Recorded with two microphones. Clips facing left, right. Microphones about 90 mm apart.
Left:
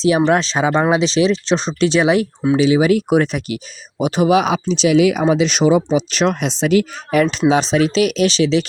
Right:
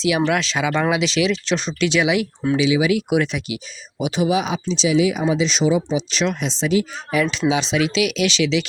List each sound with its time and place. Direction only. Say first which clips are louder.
0.3 s speech: left 5 dB; 35° left (ahead or behind)